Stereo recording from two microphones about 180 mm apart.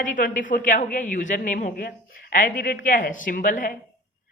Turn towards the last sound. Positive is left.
turn(degrees=45)  # may be behind; listen again after turning